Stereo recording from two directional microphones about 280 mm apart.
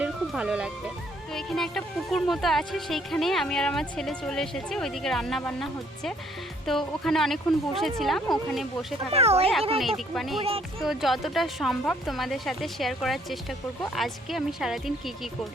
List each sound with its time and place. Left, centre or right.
0.0 s speech: centre
9.1 s speech: right
10.2 s speech: centre